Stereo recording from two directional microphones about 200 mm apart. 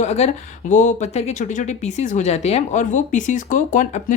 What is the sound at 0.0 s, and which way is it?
Speech, 35° left (ahead or behind).